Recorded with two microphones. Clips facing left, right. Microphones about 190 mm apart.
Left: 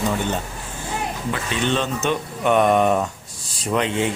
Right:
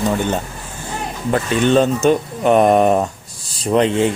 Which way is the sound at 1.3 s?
45° right (ahead or behind).